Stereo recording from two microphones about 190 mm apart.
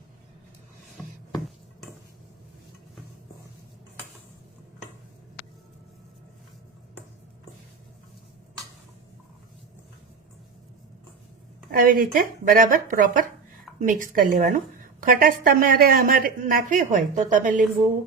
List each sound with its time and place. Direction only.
11.7 s a woman's voice: 50° right (ahead or behind)